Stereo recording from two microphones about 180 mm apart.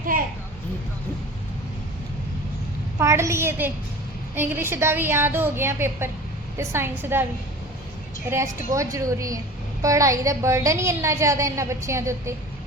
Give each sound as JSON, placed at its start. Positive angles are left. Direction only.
{"t": 3.0, "sound": "a woman's voice", "side_deg": -15}
{"t": 8.3, "sound": "a woman's voice", "side_deg": -15}